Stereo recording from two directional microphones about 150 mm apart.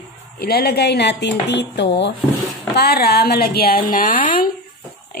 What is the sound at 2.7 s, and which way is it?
A woman's voice, 90° left.